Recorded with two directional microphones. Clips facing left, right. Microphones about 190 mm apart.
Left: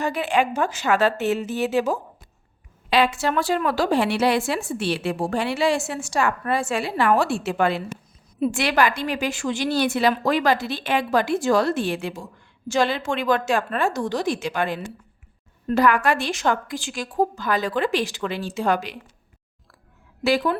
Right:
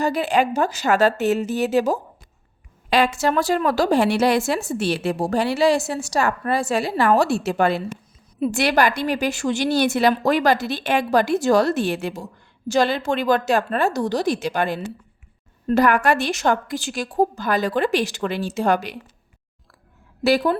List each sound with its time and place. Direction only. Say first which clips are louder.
0.0 s a woman's voice: right 2 dB; 35° right (ahead or behind)
20.2 s a woman's voice: right 3 dB; 35° right (ahead or behind)